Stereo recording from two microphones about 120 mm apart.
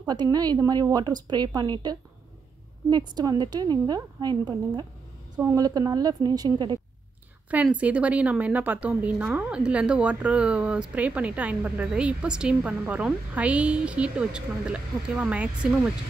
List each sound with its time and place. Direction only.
0.0 s a woman's voice: 35° right (ahead or behind)
7.5 s a woman's voice: 10° right (ahead or behind)